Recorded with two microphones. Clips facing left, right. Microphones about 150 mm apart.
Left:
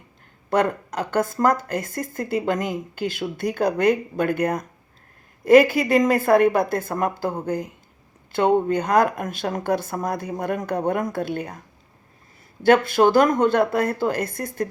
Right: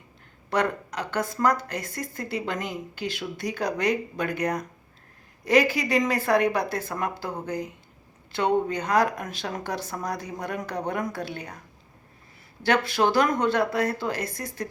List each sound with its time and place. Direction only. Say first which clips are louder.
0.5 s speech: left 5 dB; 50° left (ahead or behind)
12.6 s speech: left 7 dB; 50° left (ahead or behind)